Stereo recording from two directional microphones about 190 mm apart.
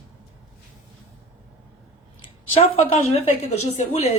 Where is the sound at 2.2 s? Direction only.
30° left (ahead or behind).